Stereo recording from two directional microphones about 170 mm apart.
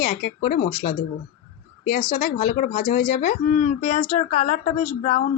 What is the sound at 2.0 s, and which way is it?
Speech, 50° left (ahead or behind).